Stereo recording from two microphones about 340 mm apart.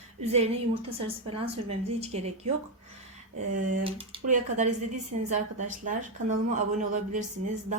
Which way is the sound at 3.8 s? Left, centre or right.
Centre.